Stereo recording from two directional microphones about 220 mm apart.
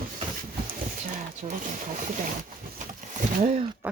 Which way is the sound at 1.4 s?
30° right (ahead or behind).